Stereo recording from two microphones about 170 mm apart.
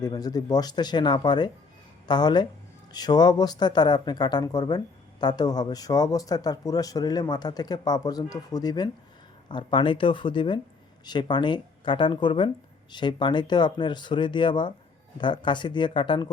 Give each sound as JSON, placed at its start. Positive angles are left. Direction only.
{"t": 0.0, "sound": "speech", "side_deg": 20}